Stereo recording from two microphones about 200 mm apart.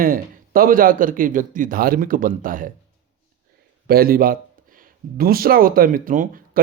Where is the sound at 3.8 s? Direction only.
50° right (ahead or behind).